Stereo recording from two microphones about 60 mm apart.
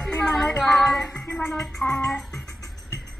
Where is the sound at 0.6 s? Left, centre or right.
Centre.